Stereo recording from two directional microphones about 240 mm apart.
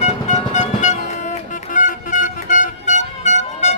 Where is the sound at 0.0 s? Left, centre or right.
Left.